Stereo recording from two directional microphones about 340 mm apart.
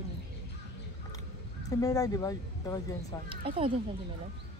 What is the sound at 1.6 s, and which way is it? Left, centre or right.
Speech, centre.